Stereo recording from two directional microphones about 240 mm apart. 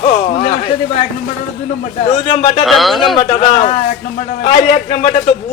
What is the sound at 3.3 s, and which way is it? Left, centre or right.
A man's voice, left.